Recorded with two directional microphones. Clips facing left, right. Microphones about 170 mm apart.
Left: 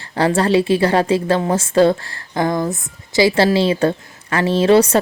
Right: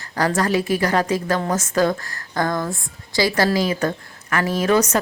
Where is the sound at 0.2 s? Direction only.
30° left (ahead or behind).